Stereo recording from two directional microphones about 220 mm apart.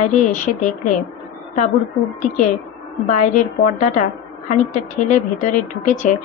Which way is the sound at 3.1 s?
35° left (ahead or behind).